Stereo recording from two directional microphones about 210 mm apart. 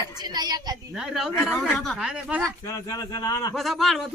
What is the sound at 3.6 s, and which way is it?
Speech, centre (ahead or behind).